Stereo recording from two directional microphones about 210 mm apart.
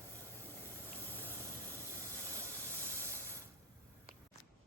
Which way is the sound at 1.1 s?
10° left (ahead or behind).